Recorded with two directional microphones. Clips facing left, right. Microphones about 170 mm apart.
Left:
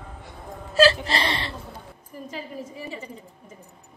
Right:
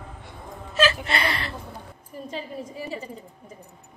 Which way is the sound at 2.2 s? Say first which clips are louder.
Right 1 dB; 30° right (ahead or behind).